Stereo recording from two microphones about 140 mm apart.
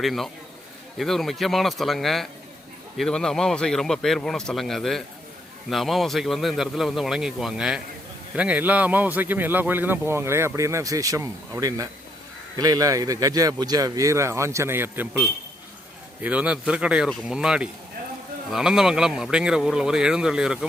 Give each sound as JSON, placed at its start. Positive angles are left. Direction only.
{"t": 0.0, "sound": "a man's voice", "side_deg": 0}
{"t": 12.5, "sound": "a man's voice", "side_deg": -30}